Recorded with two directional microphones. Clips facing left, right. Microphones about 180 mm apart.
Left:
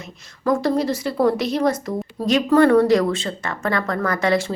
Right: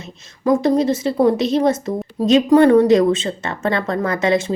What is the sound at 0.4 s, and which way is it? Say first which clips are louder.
A woman's voice: right 4 dB; 20° right (ahead or behind).